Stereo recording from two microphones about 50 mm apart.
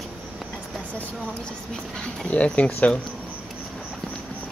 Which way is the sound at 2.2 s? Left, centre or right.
Left.